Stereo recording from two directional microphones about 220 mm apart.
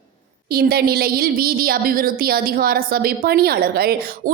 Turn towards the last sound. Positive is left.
turn(degrees=-45)  # may be behind; listen again after turning